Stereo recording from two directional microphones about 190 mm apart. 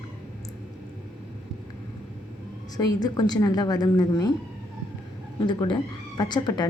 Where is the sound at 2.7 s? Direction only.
20° left (ahead or behind).